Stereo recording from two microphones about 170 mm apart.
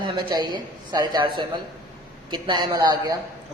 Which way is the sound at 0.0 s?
25° right (ahead or behind).